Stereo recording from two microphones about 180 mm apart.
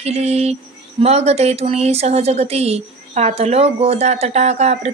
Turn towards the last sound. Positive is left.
turn(degrees=-35)  # may be behind; listen again after turning